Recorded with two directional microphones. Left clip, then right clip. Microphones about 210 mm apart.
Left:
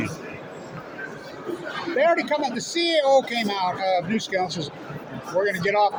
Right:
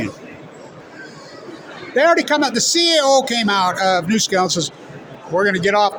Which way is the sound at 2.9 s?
50° right (ahead or behind).